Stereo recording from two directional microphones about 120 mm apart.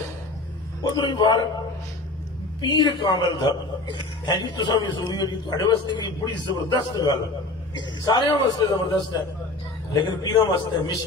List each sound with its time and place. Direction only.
0.9 s a man's voice: 40° left (ahead or behind)
2.6 s a man's voice: 40° left (ahead or behind)